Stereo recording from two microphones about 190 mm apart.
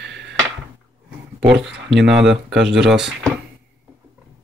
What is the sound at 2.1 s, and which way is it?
Speech, centre (ahead or behind).